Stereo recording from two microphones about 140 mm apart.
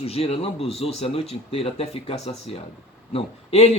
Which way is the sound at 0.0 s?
45° left (ahead or behind).